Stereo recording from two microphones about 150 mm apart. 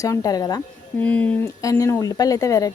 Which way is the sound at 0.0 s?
20° left (ahead or behind).